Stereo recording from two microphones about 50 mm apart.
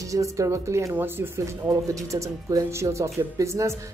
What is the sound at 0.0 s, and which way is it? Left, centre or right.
Speech, right.